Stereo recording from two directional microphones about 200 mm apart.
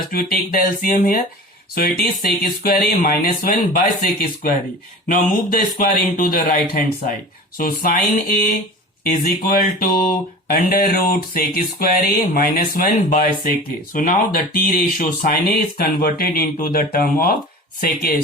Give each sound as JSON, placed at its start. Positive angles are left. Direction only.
{"t": 0.1, "sound": "speech", "side_deg": 45}